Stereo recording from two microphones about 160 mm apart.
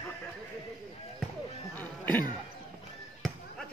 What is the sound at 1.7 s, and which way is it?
Cough, 10° left (ahead or behind).